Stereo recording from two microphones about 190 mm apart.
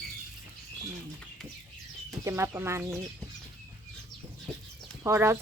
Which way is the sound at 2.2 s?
15° right (ahead or behind).